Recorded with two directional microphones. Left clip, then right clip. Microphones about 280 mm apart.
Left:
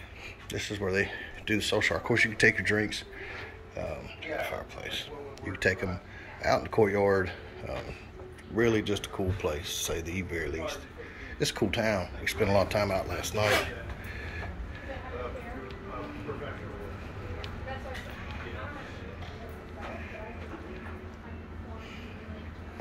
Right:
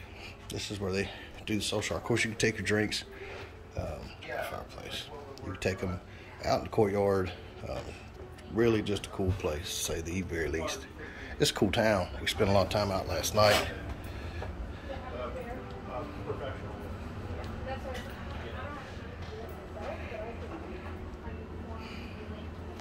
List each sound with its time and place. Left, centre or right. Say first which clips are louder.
0.5 s speech: left 4 dB; centre
4.5 s speech: left 4 dB; centre
9.7 s speech: left 2 dB; right
9.9 s speech: left 1 dB; centre